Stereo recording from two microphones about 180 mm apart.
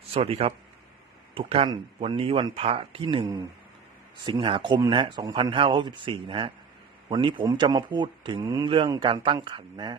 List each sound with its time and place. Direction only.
0.1 s a man's voice: 35° right (ahead or behind)
4.3 s speech: 30° right (ahead or behind)